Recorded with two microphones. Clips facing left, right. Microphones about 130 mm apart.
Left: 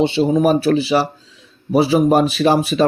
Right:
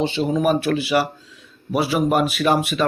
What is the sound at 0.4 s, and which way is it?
Speech, 30° left (ahead or behind).